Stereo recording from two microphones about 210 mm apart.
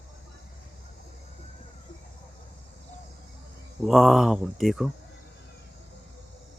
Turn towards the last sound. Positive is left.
turn(degrees=0)  # may be behind; listen again after turning